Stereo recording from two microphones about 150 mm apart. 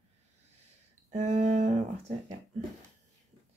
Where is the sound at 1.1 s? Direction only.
50° right (ahead or behind).